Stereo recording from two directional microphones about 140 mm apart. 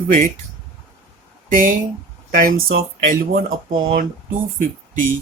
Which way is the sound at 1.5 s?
75° right (ahead or behind).